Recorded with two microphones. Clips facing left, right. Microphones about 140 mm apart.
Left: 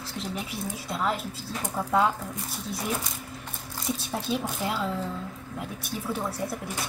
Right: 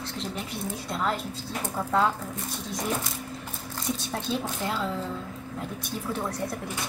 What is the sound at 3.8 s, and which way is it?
Speech, 5° left (ahead or behind).